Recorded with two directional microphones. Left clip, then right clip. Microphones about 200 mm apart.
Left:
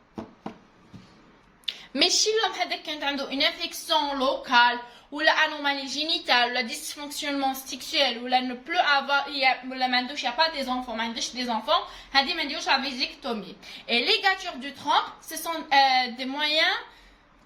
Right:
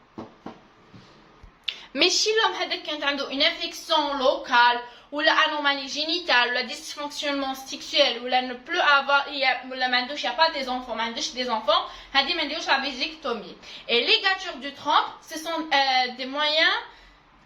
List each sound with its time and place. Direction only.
1.6 s a woman's voice: 25° left (ahead or behind)